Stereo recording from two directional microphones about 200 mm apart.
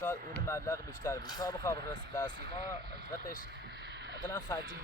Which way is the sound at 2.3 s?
55° right (ahead or behind).